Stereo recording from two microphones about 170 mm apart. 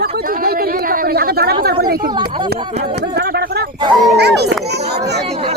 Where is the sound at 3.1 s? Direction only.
75° right (ahead or behind).